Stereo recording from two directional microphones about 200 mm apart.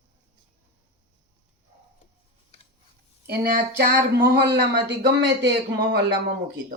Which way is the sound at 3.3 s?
40° right (ahead or behind).